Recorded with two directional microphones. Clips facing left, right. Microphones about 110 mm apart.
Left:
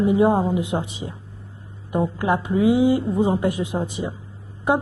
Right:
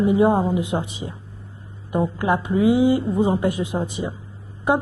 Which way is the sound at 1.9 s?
15° right (ahead or behind).